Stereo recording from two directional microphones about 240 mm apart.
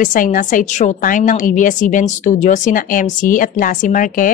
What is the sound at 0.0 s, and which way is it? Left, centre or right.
A woman's voice, left.